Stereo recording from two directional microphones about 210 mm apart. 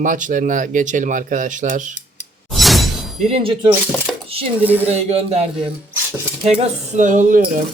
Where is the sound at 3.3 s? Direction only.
25° right (ahead or behind).